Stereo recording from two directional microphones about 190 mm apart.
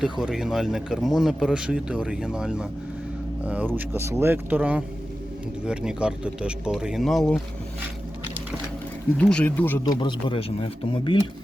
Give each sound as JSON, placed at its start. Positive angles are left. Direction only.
{"t": 0.0, "sound": "speech", "side_deg": -5}
{"t": 9.1, "sound": "speech", "side_deg": 5}
{"t": 9.8, "sound": "speech", "side_deg": 25}